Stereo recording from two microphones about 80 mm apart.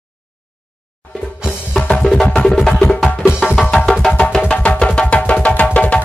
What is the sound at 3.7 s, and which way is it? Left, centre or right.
Music, centre.